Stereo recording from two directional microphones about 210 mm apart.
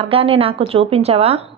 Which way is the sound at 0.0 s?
25° right (ahead or behind).